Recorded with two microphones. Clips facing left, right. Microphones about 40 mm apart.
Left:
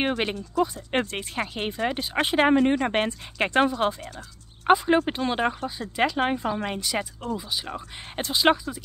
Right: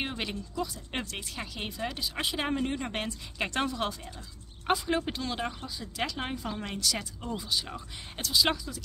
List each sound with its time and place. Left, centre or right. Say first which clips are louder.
0.2 s speech: left 9 dB; left